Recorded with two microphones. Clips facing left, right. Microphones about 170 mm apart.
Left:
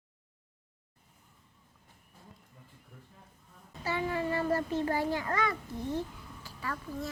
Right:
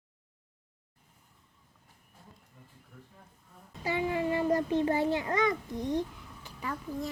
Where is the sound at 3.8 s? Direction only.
15° right (ahead or behind).